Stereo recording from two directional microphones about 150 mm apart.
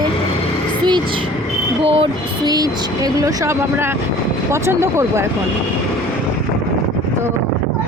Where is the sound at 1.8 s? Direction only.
40° right (ahead or behind).